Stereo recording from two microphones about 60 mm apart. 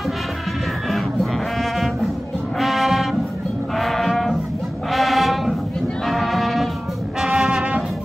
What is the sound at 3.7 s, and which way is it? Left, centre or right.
Music, centre.